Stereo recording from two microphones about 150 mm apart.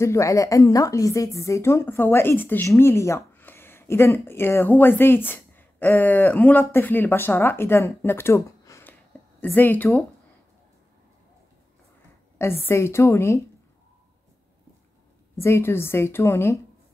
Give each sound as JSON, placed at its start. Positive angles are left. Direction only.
{"t": 0.0, "sound": "a woman's voice", "side_deg": 20}
{"t": 12.4, "sound": "a woman's voice", "side_deg": 15}
{"t": 15.4, "sound": "a woman's voice", "side_deg": 15}